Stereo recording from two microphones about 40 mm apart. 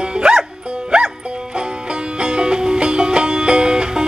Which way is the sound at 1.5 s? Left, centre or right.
Right.